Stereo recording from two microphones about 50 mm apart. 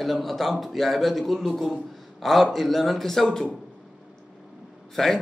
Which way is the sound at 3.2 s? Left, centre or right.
Centre.